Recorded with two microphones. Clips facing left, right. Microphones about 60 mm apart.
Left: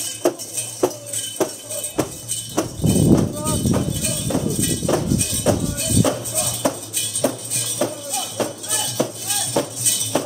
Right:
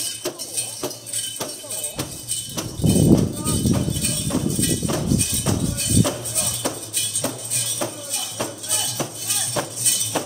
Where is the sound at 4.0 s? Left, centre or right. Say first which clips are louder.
Left 1 dB; centre.